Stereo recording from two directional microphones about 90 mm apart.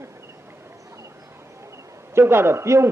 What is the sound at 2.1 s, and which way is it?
Speech, 25° right (ahead or behind).